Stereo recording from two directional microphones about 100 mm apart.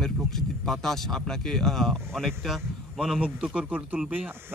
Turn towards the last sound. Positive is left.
turn(degrees=-15)  # may be behind; listen again after turning